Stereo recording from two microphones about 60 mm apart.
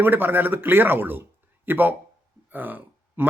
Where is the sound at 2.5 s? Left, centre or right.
Right.